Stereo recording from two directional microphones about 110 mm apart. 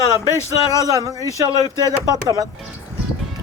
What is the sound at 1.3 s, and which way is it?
Speech, 30° left (ahead or behind).